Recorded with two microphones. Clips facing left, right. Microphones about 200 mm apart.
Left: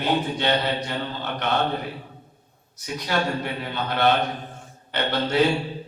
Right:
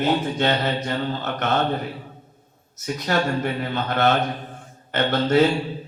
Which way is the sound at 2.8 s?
50° right (ahead or behind).